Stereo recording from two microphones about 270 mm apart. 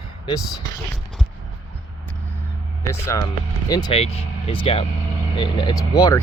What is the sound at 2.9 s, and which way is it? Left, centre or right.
Speech, centre.